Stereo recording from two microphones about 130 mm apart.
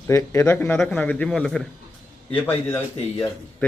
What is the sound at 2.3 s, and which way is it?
Speech, 15° left (ahead or behind).